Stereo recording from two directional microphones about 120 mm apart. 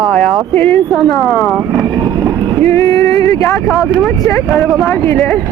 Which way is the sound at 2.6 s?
25° left (ahead or behind).